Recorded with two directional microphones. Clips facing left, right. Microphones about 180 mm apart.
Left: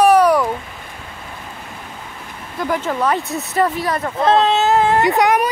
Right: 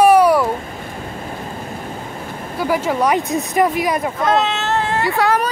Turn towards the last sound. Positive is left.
turn(degrees=15)  # may be behind; listen again after turning